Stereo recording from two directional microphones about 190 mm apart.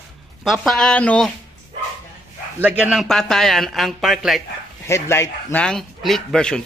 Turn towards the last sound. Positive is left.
turn(degrees=5)  # may be behind; listen again after turning